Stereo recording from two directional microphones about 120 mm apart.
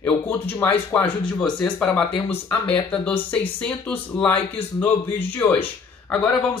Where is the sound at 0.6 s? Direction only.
15° left (ahead or behind).